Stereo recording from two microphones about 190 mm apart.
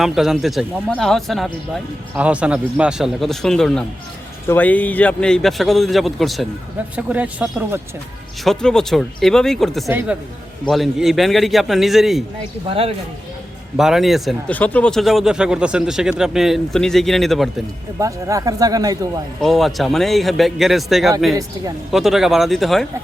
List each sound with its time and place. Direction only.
0.0 s speech: centre (ahead or behind)
8.4 s speech: 5° left (ahead or behind)
12.6 s speech: 30° right (ahead or behind)
13.7 s speech: centre (ahead or behind)
18.0 s speech: 15° right (ahead or behind)
19.4 s speech: centre (ahead or behind)